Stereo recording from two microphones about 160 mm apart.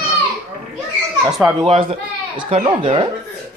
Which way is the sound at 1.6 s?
40° right (ahead or behind).